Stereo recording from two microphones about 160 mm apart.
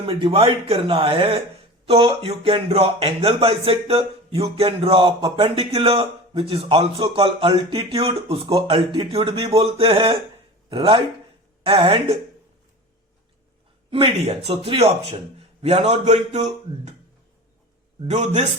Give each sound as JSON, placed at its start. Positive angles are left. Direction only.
{"t": 0.0, "sound": "speech", "side_deg": -35}
{"t": 13.9, "sound": "a man's voice", "side_deg": -35}
{"t": 18.1, "sound": "a man's voice", "side_deg": -45}